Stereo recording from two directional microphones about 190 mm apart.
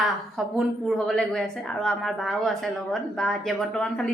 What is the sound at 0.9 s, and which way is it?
A woman's voice, centre (ahead or behind).